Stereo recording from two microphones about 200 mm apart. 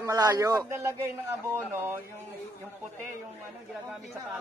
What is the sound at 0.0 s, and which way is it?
A man's voice, 20° right (ahead or behind).